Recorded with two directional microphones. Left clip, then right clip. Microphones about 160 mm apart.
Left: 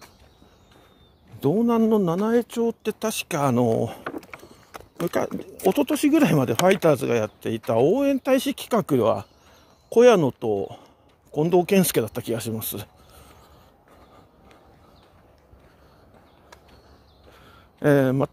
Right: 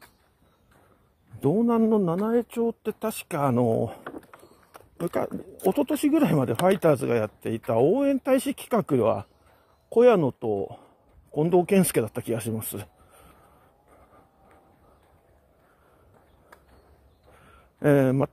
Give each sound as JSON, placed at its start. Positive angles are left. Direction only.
{"t": 1.4, "sound": "speech", "side_deg": -15}
{"t": 4.0, "sound": "a sound", "side_deg": 30}
{"t": 5.0, "sound": "speech", "side_deg": 0}
{"t": 17.7, "sound": "speech", "side_deg": -15}